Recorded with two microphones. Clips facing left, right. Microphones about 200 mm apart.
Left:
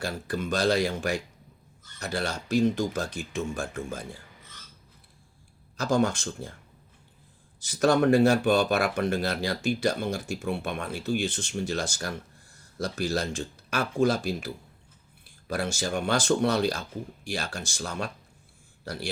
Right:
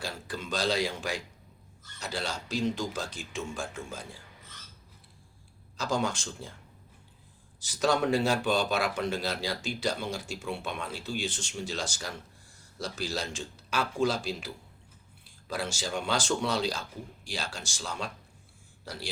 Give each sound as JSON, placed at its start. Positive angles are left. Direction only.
{"t": 0.0, "sound": "speech", "side_deg": 55}
{"t": 5.7, "sound": "speech", "side_deg": 55}
{"t": 7.6, "sound": "speech", "side_deg": 60}